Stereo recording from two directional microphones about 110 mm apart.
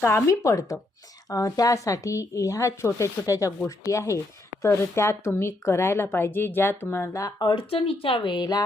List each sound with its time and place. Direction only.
0.0 s speech: 25° left (ahead or behind)